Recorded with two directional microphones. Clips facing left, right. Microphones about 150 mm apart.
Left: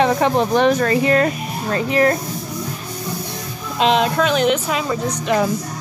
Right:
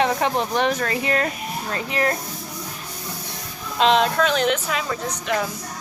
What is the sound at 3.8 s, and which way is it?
Speech, 5° left (ahead or behind).